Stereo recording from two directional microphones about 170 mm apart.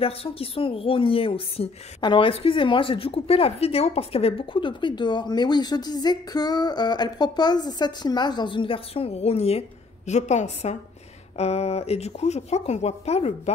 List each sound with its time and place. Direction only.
0.0 s a woman's voice: 35° left (ahead or behind)